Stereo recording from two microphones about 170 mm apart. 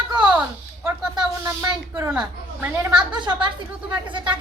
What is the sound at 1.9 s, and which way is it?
A woman's voice, 15° right (ahead or behind).